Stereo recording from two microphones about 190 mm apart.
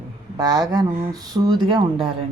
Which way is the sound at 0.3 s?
20° right (ahead or behind).